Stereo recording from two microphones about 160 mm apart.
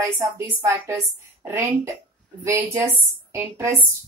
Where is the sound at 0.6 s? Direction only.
20° right (ahead or behind).